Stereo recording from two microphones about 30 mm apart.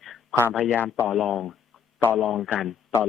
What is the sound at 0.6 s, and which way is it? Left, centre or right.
Speech, right.